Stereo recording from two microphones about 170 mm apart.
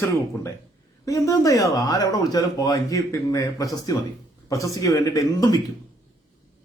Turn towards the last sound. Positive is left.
turn(degrees=20)  # may be behind; listen again after turning